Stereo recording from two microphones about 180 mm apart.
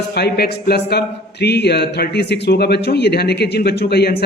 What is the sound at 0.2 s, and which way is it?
A man's voice, 60° left (ahead or behind).